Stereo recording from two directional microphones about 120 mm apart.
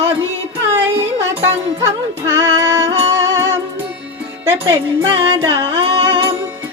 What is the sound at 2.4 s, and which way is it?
Music, 30° right (ahead or behind).